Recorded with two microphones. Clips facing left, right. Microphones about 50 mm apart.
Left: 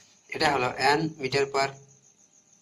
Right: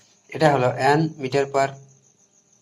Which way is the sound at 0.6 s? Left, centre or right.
Centre.